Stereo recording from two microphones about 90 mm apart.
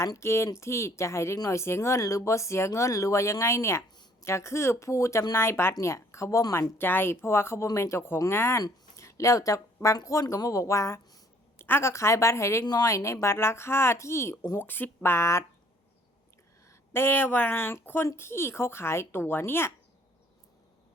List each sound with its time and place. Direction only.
0.0 s speech: 35° left (ahead or behind)
6.7 s speech: 25° left (ahead or behind)
12.6 s speech: 45° left (ahead or behind)
16.6 s speech: 25° left (ahead or behind)